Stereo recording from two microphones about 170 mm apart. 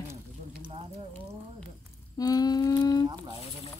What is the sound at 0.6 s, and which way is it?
Sizzle, 35° right (ahead or behind).